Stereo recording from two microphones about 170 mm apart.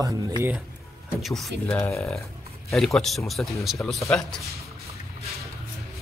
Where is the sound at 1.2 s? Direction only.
Centre (ahead or behind).